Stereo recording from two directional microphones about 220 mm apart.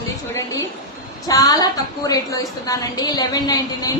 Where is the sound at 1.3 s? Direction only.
15° left (ahead or behind).